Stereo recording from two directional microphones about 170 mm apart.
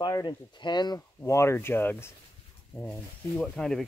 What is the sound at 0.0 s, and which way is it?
Speech, 20° left (ahead or behind).